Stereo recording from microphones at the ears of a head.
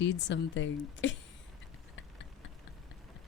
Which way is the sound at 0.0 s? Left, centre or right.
Left.